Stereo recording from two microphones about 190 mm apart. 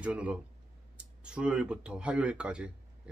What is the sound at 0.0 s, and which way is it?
Speech, 5° right (ahead or behind).